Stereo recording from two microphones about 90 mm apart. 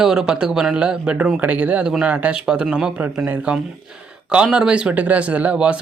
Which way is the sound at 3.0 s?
20° right (ahead or behind).